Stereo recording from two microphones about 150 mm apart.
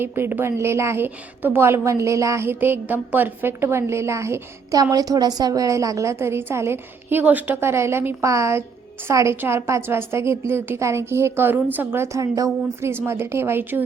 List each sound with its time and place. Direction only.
0.0 s a woman's voice: 15° right (ahead or behind)